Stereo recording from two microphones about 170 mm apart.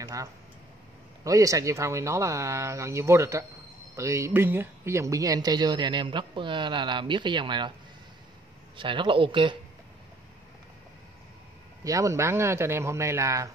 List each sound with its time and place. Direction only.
0.0 s tick-tock: 20° right (ahead or behind)
1.2 s speech: 20° right (ahead or behind)
8.7 s speech: 30° right (ahead or behind)
11.8 s speech: 20° right (ahead or behind)